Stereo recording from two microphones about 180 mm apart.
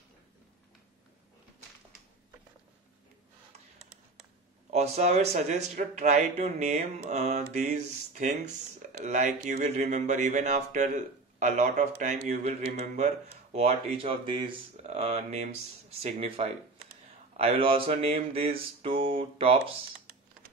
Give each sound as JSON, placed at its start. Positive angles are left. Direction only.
{"t": 4.7, "sound": "speech", "side_deg": -40}